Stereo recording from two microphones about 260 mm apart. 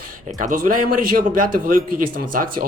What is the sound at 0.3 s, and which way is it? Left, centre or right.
Speech, right.